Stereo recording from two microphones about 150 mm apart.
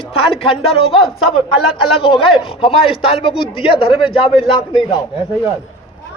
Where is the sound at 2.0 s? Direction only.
35° left (ahead or behind).